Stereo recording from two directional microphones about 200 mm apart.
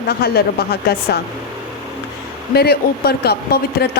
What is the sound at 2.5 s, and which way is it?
A woman's voice, 50° left (ahead or behind).